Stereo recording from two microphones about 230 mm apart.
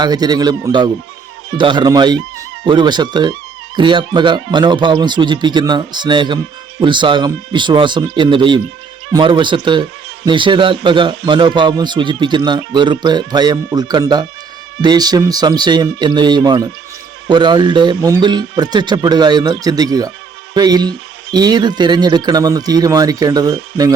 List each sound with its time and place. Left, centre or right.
0.0 s speech: centre